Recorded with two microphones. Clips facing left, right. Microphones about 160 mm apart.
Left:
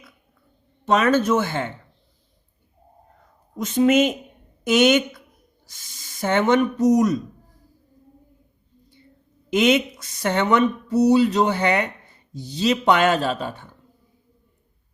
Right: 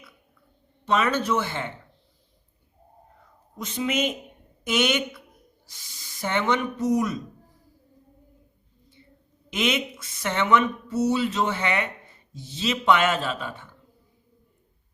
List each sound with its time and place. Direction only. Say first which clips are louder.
0.9 s speech: left 5 dB; 45° left (ahead or behind)
3.6 s speech: left 9 dB; 45° left (ahead or behind)
9.6 s speech: left 8 dB; 40° left (ahead or behind)